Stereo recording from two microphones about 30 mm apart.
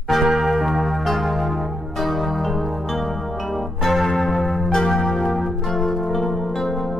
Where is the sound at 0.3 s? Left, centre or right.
Centre.